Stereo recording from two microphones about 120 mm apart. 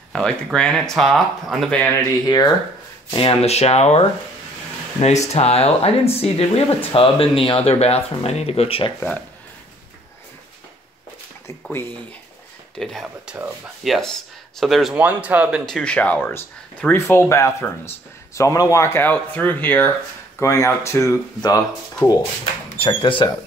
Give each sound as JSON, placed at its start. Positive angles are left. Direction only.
{"t": 0.1, "sound": "speech", "side_deg": 5}
{"t": 2.2, "sound": "speech", "side_deg": 35}
{"t": 3.1, "sound": "speech", "side_deg": 45}
{"t": 12.7, "sound": "speech", "side_deg": 5}
{"t": 15.0, "sound": "speech", "side_deg": -10}
{"t": 15.6, "sound": "speech", "side_deg": 5}
{"t": 22.8, "sound": "speech", "side_deg": 45}